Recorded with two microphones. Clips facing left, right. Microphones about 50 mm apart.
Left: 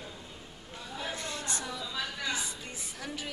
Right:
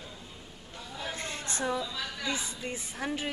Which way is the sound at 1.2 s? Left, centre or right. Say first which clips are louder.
Right 2 dB; right.